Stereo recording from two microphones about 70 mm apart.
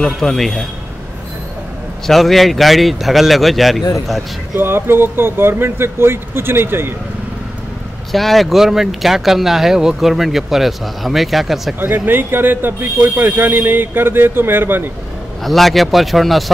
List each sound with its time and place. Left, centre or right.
0.0 s a man's voice: centre
2.0 s speech: centre
4.6 s speech: right
8.1 s speech: centre
11.8 s speech: right
15.4 s speech: centre